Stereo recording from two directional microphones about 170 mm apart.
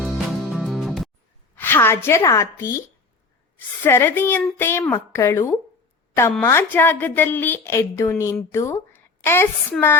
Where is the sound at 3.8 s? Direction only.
15° left (ahead or behind).